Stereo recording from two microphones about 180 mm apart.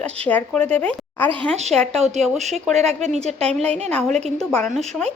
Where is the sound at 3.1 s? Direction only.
35° right (ahead or behind).